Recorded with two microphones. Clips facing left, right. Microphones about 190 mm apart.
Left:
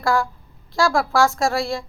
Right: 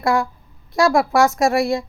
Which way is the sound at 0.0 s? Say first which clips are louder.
Right 2 dB; 20° right (ahead or behind).